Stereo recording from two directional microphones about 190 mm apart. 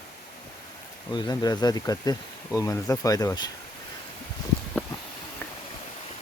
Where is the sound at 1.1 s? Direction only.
20° left (ahead or behind).